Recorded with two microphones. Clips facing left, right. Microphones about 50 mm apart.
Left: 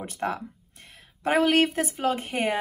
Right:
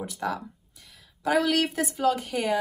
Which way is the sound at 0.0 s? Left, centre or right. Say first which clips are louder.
Left 1 dB; left.